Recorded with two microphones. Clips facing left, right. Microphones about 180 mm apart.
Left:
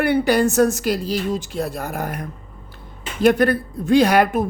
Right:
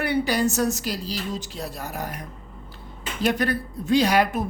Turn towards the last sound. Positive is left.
turn(degrees=55)  # may be behind; listen again after turning